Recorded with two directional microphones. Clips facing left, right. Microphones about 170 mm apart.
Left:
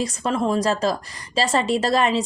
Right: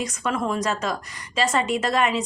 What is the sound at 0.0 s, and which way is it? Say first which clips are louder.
A woman's voice: left 3 dB; 30° left (ahead or behind).